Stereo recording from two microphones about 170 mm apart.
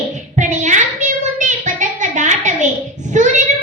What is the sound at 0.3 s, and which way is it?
Child singing, 45° right (ahead or behind).